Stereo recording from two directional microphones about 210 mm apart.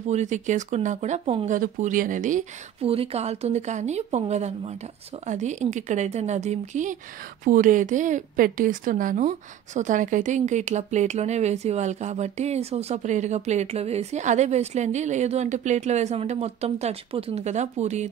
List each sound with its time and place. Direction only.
0.1 s a woman's voice: 35° right (ahead or behind)